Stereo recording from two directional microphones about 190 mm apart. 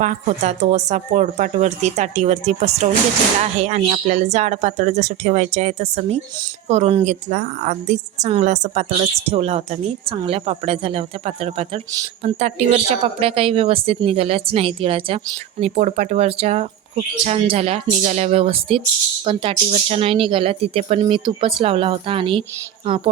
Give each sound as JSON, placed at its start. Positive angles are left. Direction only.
{"t": 0.0, "sound": "a woman's voice", "side_deg": -40}